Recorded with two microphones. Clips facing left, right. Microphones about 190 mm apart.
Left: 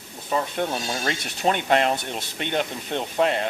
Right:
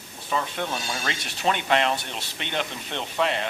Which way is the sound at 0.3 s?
45° left (ahead or behind).